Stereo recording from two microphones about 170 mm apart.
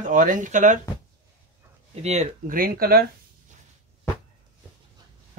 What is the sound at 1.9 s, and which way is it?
Speech, 40° right (ahead or behind).